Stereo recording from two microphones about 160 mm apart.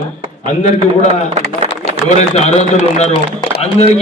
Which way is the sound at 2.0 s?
45° left (ahead or behind).